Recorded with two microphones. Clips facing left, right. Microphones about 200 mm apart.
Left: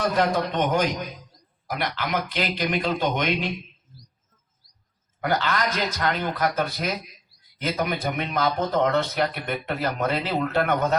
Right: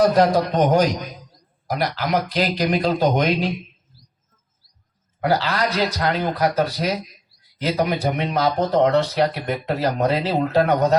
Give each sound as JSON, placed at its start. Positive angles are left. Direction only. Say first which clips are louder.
{"t": 0.0, "sound": "speech", "louder": "right 7 dB", "side_deg": -35}
{"t": 5.2, "sound": "speech", "louder": "right 4 dB", "side_deg": -35}